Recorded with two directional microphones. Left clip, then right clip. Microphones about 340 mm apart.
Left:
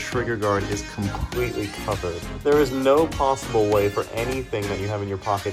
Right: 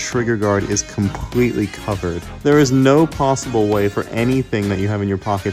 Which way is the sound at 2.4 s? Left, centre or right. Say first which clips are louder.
Right 5 dB; right.